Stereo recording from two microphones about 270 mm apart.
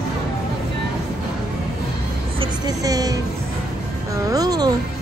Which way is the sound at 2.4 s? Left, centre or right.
Centre.